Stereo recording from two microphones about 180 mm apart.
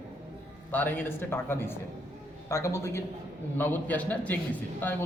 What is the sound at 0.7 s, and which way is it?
A man's voice, 10° left (ahead or behind).